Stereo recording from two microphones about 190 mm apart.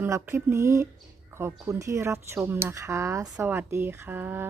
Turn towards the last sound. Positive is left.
turn(degrees=-10)  # may be behind; listen again after turning